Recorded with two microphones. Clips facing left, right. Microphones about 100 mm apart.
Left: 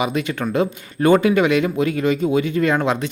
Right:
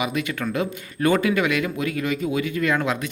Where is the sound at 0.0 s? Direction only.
30° left (ahead or behind).